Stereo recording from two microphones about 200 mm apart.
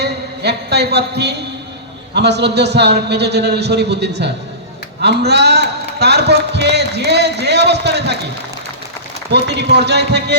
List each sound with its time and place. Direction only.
0.0 s a sound: 55° right (ahead or behind)
2.1 s a man's voice: 55° right (ahead or behind)
9.3 s a man's voice: 60° right (ahead or behind)